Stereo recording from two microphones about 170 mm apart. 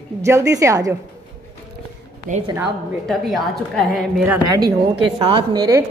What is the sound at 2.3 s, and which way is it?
Speech, 50° right (ahead or behind).